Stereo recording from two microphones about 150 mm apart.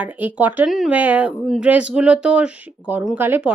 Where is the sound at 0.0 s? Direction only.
10° right (ahead or behind).